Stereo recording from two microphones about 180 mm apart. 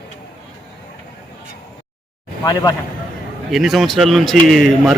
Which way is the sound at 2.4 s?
20° left (ahead or behind).